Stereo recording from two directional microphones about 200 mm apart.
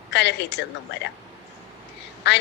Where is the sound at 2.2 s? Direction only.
60° left (ahead or behind).